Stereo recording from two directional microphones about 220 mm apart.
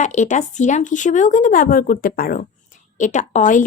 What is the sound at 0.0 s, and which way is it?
A woman's voice, 35° left (ahead or behind).